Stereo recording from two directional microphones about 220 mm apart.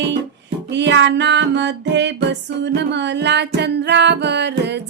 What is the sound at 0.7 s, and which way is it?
Music, 50° right (ahead or behind).